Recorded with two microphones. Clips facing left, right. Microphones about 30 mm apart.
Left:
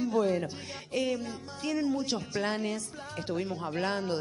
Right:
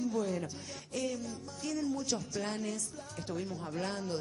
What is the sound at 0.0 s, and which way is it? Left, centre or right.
A man's voice, left.